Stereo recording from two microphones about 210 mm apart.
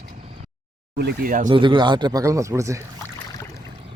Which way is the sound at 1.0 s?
45° right (ahead or behind).